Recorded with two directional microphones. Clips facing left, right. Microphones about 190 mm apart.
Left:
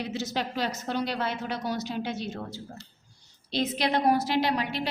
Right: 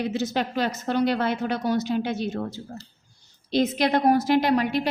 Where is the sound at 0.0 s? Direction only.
55° right (ahead or behind).